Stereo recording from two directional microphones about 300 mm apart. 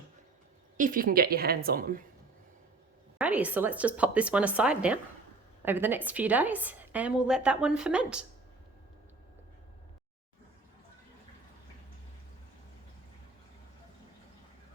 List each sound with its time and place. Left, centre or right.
0.8 s a woman's voice: right
3.2 s a woman's voice: centre